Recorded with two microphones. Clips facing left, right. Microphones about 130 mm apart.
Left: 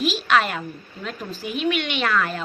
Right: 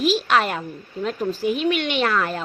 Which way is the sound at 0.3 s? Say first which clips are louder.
Even; 35° right (ahead or behind).